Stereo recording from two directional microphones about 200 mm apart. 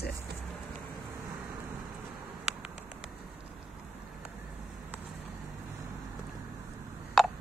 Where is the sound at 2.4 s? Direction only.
5° right (ahead or behind).